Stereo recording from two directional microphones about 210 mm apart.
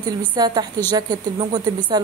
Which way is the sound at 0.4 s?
20° right (ahead or behind).